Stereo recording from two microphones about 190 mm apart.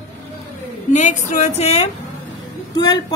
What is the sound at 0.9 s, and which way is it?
A woman's voice, 40° left (ahead or behind).